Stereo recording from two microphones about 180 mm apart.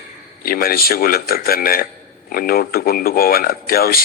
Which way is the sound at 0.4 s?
55° left (ahead or behind).